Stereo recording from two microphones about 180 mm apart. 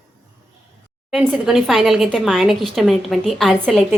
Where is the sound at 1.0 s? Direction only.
5° right (ahead or behind).